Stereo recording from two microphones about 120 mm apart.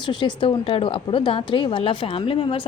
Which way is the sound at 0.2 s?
50° left (ahead or behind).